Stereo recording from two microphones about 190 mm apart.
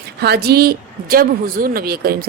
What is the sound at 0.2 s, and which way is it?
A woman's voice, 55° right (ahead or behind).